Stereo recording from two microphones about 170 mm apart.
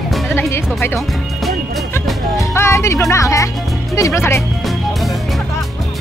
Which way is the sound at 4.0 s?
15° left (ahead or behind).